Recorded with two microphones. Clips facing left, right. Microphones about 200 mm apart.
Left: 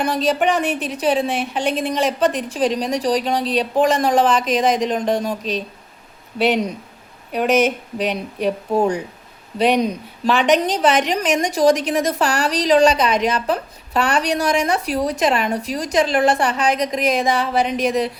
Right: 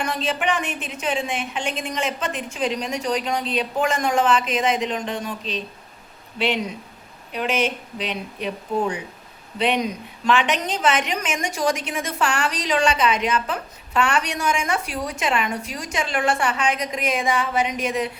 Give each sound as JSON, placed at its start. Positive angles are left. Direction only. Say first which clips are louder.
{"t": 0.0, "sound": "a woman's voice", "louder": "left 6 dB", "side_deg": 35}
{"t": 7.3, "sound": "a woman's voice", "louder": "left 7 dB", "side_deg": 45}